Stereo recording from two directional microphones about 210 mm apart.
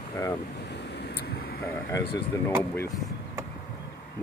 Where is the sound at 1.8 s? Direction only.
15° left (ahead or behind).